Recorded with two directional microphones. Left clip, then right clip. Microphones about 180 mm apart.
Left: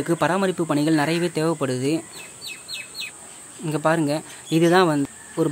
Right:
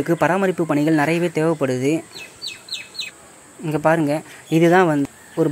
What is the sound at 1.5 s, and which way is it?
Speech, 5° right (ahead or behind).